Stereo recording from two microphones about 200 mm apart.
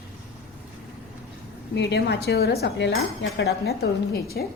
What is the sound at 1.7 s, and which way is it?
Speech, 55° left (ahead or behind).